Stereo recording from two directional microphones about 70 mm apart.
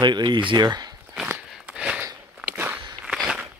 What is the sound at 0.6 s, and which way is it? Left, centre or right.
Speech, right.